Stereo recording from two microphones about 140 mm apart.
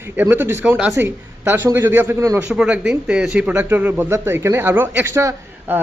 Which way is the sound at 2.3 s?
10° right (ahead or behind).